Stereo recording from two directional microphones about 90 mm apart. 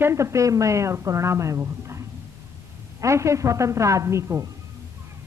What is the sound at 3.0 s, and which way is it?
A woman's voice, 35° right (ahead or behind).